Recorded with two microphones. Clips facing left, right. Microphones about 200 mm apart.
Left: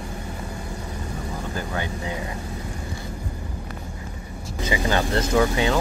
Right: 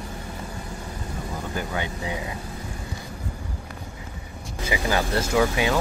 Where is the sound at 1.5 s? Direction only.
20° right (ahead or behind).